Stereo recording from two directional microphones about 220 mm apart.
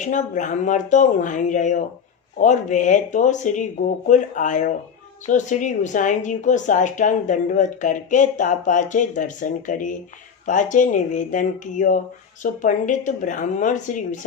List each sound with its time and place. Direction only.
0.0 s a woman's voice: 35° left (ahead or behind)